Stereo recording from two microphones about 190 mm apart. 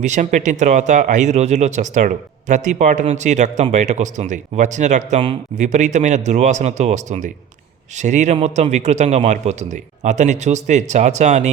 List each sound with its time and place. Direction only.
0.0 s speech: 40° right (ahead or behind)